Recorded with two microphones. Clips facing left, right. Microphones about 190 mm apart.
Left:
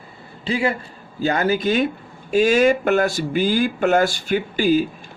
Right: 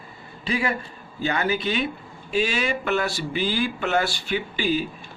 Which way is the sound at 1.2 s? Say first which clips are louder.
Left 5 dB; 40° left (ahead or behind).